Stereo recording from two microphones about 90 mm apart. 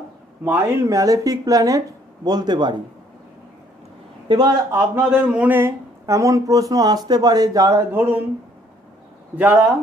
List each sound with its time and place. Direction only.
0.5 s speech: 25° right (ahead or behind)
2.2 s a man's voice: 50° right (ahead or behind)
4.3 s a man's voice: 50° right (ahead or behind)
4.6 s speech: 30° right (ahead or behind)
5.0 s speech: 20° right (ahead or behind); by 7.8 s 40° right (ahead or behind)
7.9 s speech: 25° right (ahead or behind)
9.4 s speech: 20° right (ahead or behind)